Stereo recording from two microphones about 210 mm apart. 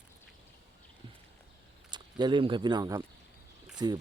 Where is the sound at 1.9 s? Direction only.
20° right (ahead or behind).